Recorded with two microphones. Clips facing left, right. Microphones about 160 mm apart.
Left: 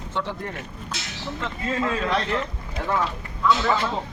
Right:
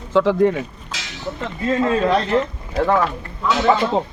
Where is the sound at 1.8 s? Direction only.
35° right (ahead or behind).